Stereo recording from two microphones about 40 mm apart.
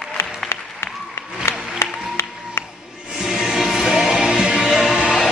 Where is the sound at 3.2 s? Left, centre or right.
Centre.